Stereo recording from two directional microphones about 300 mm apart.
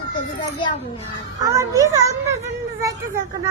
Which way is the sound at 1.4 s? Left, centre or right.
Centre.